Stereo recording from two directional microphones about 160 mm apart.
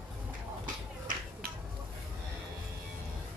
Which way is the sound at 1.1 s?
55° right (ahead or behind).